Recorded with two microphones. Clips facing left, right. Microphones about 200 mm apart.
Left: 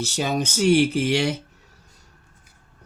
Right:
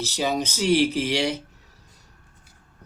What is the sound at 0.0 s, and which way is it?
Speech, 50° left (ahead or behind).